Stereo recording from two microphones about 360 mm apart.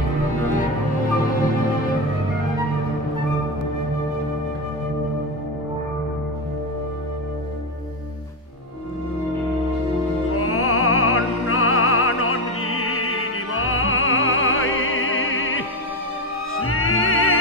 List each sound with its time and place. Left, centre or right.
10.3 s music: left